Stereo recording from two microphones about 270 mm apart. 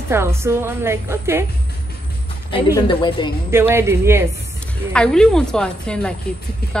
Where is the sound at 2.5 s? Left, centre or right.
Centre.